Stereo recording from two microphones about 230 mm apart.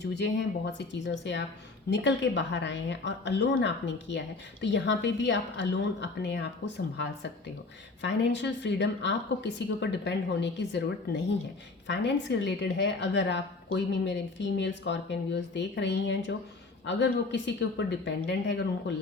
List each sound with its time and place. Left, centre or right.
0.0 s a woman's voice: left